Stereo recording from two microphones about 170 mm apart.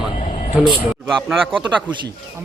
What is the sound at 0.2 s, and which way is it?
Vehicle, 45° left (ahead or behind).